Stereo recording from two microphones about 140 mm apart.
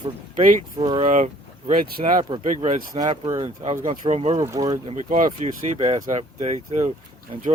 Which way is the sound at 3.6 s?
60° right (ahead or behind).